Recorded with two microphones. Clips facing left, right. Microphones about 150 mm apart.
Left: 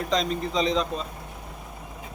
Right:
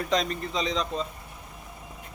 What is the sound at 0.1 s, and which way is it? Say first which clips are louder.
Speech: left 2 dB; centre (ahead or behind).